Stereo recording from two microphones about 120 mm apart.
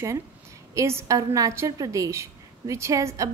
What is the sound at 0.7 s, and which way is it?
A woman's voice, 25° right (ahead or behind).